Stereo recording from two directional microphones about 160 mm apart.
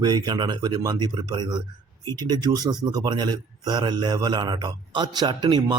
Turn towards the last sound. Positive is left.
turn(degrees=-25)  # may be behind; listen again after turning